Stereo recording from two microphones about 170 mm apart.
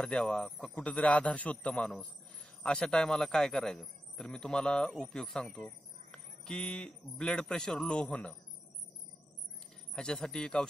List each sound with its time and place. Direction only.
0.0 s speech: 5° left (ahead or behind)
9.9 s speech: 5° left (ahead or behind)